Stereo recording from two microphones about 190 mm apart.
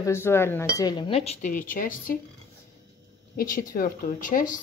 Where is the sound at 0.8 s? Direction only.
20° left (ahead or behind); by 2.2 s 45° left (ahead or behind).